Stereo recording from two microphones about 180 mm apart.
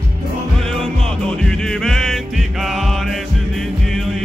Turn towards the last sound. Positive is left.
turn(degrees=0)  # may be behind; listen again after turning